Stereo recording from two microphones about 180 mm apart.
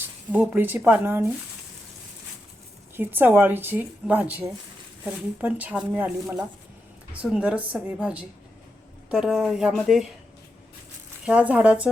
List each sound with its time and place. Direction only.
0.0 s speech: 10° right (ahead or behind)
2.9 s speech: 10° right (ahead or behind)
11.3 s speech: 5° right (ahead or behind)